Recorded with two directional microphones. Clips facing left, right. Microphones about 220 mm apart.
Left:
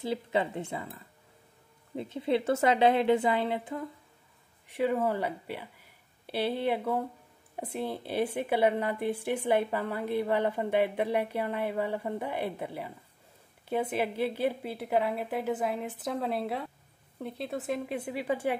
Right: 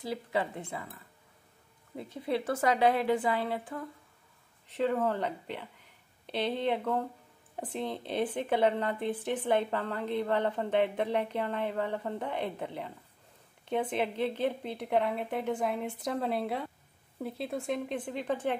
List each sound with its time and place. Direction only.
0.0 s a woman's voice: 25° left (ahead or behind)
2.0 s a woman's voice: 25° left (ahead or behind)
4.6 s a woman's voice: 10° left (ahead or behind)